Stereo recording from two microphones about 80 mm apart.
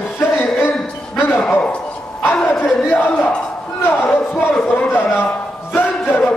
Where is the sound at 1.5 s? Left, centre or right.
Centre.